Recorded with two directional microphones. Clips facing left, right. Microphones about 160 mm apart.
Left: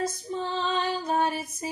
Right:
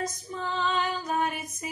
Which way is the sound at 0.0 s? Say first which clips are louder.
Left 3 dB; 30° left (ahead or behind).